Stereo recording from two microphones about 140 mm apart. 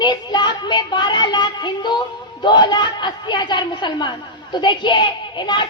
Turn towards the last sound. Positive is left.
turn(degrees=35)  # may be behind; listen again after turning